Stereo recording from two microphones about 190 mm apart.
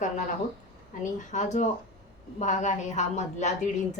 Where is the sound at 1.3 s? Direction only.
40° left (ahead or behind).